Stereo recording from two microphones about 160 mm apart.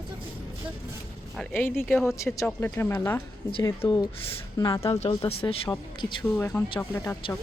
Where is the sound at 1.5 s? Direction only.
15° left (ahead or behind).